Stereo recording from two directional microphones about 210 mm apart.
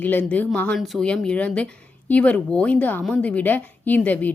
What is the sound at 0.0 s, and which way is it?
A woman's voice, 10° left (ahead or behind).